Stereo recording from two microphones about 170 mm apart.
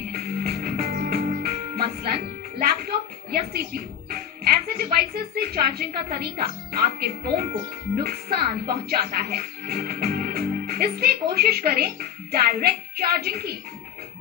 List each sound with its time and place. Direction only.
0.1 s music: 60° right (ahead or behind)
2.0 s speech: 65° right (ahead or behind)